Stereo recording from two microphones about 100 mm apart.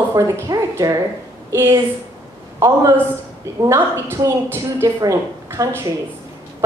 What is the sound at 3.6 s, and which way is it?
A woman's voice, 30° right (ahead or behind).